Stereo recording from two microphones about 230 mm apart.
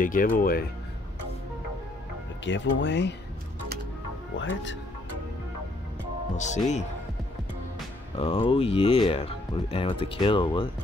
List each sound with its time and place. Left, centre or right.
0.0 s speech: left
2.4 s speech: left
4.4 s speech: left
6.3 s speech: left
8.2 s speech: left